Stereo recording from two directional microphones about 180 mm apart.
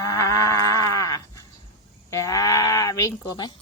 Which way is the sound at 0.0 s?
15° left (ahead or behind).